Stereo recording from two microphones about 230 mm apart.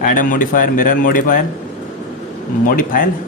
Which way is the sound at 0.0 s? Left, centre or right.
Left.